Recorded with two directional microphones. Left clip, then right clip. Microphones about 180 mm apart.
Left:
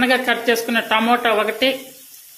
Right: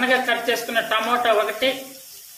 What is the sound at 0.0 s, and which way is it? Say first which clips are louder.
Speech: left 2 dB; 50° left (ahead or behind).